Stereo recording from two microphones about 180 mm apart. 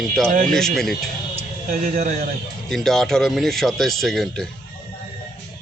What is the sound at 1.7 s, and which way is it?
Speech, 50° right (ahead or behind).